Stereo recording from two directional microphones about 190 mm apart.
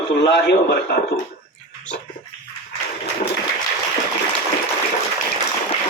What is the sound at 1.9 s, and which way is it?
Dog, 5° left (ahead or behind).